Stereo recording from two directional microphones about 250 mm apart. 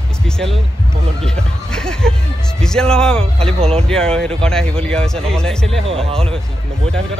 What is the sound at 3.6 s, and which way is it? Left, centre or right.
Speech, right.